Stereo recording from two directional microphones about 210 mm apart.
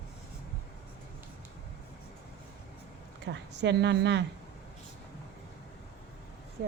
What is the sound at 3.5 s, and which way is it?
Speech, 55° right (ahead or behind).